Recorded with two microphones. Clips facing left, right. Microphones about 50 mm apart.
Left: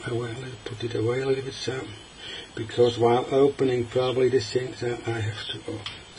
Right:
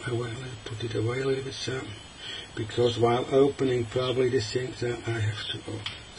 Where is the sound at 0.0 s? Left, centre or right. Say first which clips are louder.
Left 2 dB; centre.